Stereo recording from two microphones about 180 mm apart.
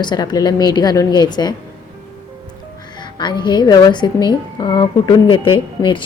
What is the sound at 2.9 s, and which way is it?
A woman's voice, 25° left (ahead or behind).